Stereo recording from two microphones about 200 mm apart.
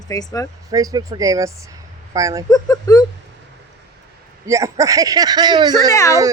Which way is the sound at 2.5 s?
15° left (ahead or behind).